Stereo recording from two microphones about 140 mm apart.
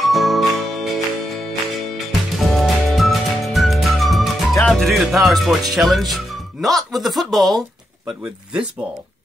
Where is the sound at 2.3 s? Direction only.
Centre (ahead or behind).